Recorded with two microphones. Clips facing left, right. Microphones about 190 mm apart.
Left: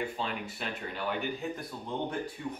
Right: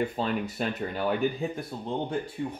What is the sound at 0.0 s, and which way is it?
Speech, 40° right (ahead or behind).